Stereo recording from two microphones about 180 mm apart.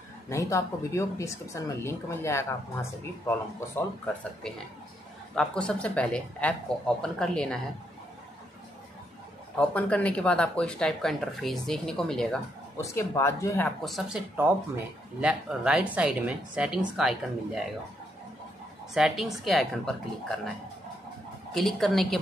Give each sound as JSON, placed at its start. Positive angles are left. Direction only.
{"t": 0.3, "sound": "speech", "side_deg": 15}
{"t": 9.6, "sound": "speech", "side_deg": 5}
{"t": 12.7, "sound": "speech", "side_deg": 15}
{"t": 18.9, "sound": "speech", "side_deg": 0}
{"t": 21.5, "sound": "speech", "side_deg": 0}